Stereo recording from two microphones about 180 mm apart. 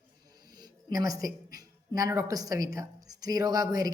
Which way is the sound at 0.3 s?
20° right (ahead or behind).